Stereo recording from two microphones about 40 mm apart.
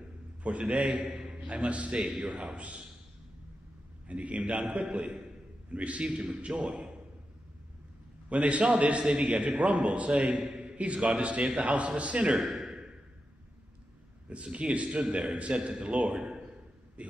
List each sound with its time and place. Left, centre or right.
0.4 s a man's voice: right
2.0 s a man's voice: centre
2.2 s a man's voice: right
4.1 s a man's voice: right
6.0 s a man's voice: right
6.3 s a man's voice: right
6.7 s a man's voice: centre
8.3 s a man's voice: right
12.4 s a sound: centre
14.3 s a man's voice: right
14.9 s a man's voice: centre
17.0 s a sound: right